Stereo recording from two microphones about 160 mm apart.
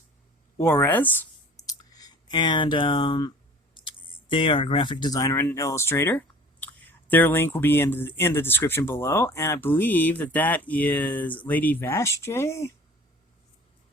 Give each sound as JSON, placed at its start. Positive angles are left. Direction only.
{"t": 0.6, "sound": "speech", "side_deg": 15}
{"t": 1.6, "sound": "a sound", "side_deg": 25}
{"t": 3.8, "sound": "speech", "side_deg": 30}